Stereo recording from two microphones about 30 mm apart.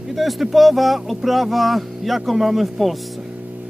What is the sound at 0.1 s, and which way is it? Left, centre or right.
Speech, centre.